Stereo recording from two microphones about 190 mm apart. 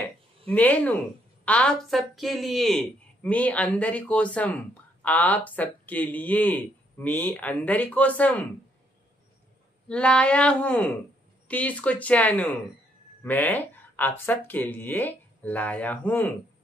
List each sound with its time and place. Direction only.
0.5 s a woman's voice: 10° left (ahead or behind)
9.8 s a woman's voice: 5° left (ahead or behind)